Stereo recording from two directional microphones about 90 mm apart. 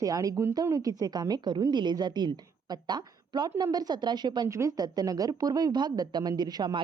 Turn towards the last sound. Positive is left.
turn(degrees=-50)  # may be behind; listen again after turning